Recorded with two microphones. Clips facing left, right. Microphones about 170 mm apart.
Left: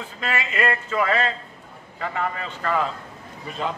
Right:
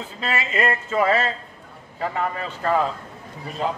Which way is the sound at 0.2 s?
30° right (ahead or behind).